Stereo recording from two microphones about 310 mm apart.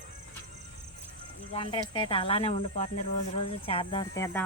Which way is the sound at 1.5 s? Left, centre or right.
Centre.